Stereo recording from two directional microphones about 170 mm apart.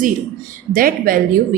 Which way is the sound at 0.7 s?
55° right (ahead or behind).